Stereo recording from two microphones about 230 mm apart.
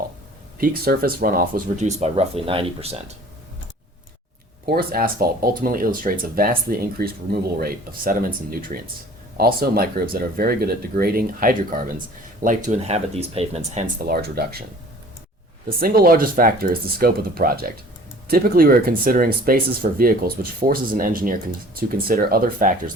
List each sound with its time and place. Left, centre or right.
0.6 s speech: right
4.6 s speech: right
14.1 s speech: right
15.8 s speech: right